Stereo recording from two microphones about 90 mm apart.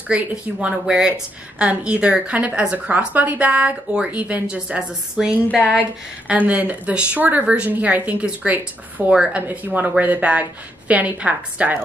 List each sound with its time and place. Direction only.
0.1 s a woman's voice: 10° right (ahead or behind)